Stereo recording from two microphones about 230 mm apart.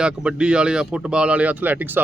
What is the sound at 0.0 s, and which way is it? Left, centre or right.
Speech, centre.